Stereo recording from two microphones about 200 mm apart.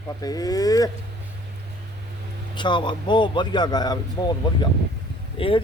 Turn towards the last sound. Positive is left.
turn(degrees=25)  # may be behind; listen again after turning